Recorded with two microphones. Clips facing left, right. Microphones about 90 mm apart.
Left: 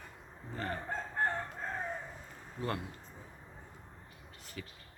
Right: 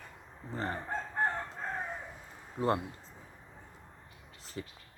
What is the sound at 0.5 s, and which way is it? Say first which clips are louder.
Chicken: right 2 dB; 25° right (ahead or behind).